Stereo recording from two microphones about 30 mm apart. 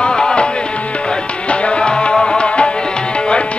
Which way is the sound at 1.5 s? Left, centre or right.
Left.